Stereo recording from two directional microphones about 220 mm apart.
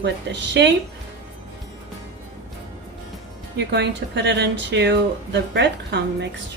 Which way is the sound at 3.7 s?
50° right (ahead or behind).